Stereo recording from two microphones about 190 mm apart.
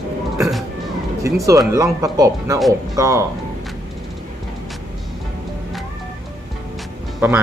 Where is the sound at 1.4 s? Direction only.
15° right (ahead or behind).